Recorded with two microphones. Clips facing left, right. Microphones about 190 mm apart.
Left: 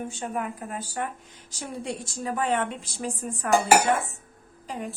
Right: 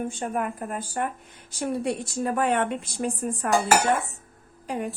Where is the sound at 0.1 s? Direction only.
50° right (ahead or behind).